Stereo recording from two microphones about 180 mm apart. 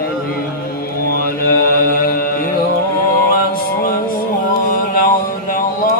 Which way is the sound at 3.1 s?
50° left (ahead or behind).